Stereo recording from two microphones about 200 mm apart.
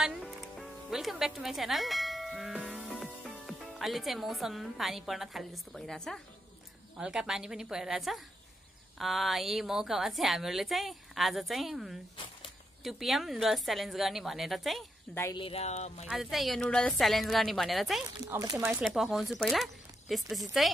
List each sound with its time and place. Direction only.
0.0 s music: centre (ahead or behind)
2.9 s a woman's voice: centre (ahead or behind)
15.3 s speech: 30° left (ahead or behind)
16.1 s a woman's voice: centre (ahead or behind)
18.2 s speech: 15° right (ahead or behind)
18.6 s a woman's voice: 5° right (ahead or behind)